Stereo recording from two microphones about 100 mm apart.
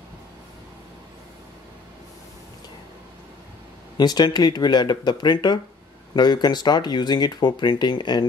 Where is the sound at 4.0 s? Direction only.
45° left (ahead or behind).